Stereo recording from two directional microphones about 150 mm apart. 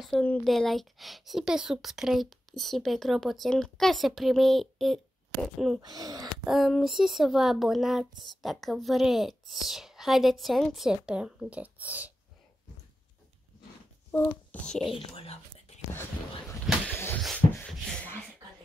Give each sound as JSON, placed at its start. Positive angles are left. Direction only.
{"t": 0.2, "sound": "a child's voice", "side_deg": 10}
{"t": 5.8, "sound": "speech", "side_deg": -25}
{"t": 6.4, "sound": "speech", "side_deg": 0}
{"t": 14.1, "sound": "a child's voice", "side_deg": 10}
{"t": 15.0, "sound": "speech", "side_deg": 40}
{"t": 15.9, "sound": "speech", "side_deg": 15}
{"t": 16.8, "sound": "a sound", "side_deg": 15}